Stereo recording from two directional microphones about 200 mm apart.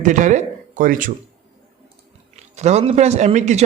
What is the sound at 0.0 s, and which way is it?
Speech, 40° right (ahead or behind).